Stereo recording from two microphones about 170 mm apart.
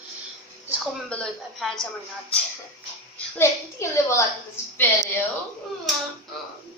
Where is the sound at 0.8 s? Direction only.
5° left (ahead or behind).